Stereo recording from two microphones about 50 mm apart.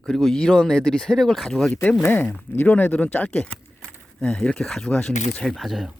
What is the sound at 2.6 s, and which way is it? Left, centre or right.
Speech, left.